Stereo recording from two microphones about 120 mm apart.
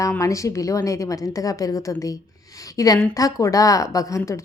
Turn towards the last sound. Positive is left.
turn(degrees=25)  # may be behind; listen again after turning